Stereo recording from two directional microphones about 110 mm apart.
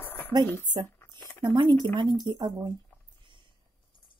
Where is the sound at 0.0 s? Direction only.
20° left (ahead or behind).